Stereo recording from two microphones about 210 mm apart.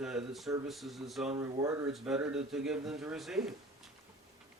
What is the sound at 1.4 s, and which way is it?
Speech, 15° right (ahead or behind).